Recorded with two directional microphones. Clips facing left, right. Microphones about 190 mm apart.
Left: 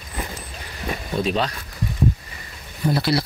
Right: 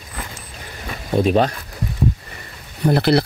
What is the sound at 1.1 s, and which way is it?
Speech, 55° right (ahead or behind).